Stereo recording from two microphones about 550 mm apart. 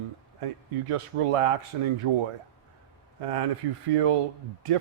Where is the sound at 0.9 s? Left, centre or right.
Right.